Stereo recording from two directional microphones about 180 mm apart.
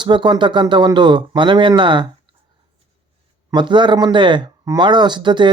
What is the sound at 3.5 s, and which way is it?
Speech, 25° right (ahead or behind).